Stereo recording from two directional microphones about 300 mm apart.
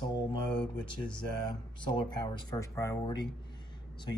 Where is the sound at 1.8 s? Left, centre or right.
Centre.